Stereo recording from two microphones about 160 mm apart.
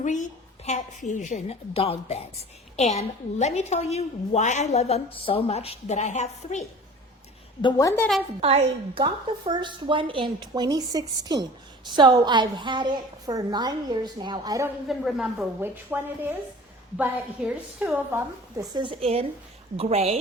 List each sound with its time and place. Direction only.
0.0 s a woman's voice: 50° left (ahead or behind)
7.6 s a woman's voice: 20° left (ahead or behind)
8.4 s a woman's voice: 40° right (ahead or behind); by 14.7 s 20° right (ahead or behind)
14.8 s speech: centre (ahead or behind)
15.6 s a woman's voice: 10° right (ahead or behind)
18.5 s speech: 25° right (ahead or behind)